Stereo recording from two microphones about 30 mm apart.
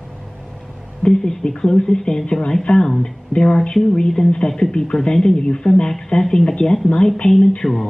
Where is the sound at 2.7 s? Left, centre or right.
Left.